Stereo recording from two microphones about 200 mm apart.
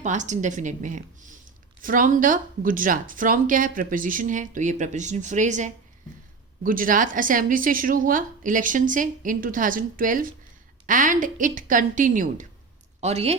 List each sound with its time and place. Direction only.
0.0 s a woman's voice: 35° right (ahead or behind)